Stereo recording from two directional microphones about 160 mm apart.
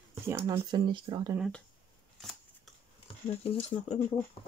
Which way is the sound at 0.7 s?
30° right (ahead or behind).